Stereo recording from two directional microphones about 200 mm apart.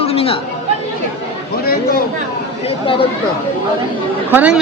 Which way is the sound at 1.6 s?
50° left (ahead or behind).